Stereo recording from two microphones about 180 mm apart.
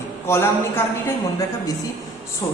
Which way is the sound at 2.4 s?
15° left (ahead or behind).